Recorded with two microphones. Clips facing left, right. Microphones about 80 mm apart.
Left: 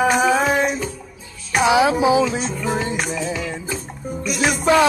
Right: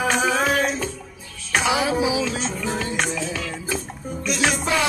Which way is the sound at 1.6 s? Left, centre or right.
Left.